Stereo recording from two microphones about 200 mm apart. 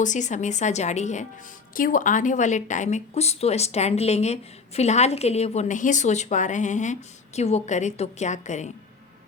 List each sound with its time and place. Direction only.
0.0 s a woman's voice: 40° left (ahead or behind)